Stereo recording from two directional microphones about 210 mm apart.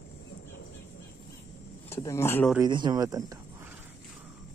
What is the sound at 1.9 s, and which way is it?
Speech, 15° left (ahead or behind).